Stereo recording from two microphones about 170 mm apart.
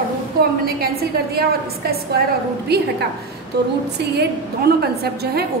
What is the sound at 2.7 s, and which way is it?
Speech, 70° right (ahead or behind).